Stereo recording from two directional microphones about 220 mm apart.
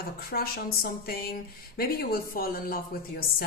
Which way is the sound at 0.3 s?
45° left (ahead or behind).